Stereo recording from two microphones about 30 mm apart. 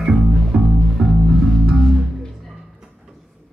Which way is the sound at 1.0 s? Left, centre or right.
Centre.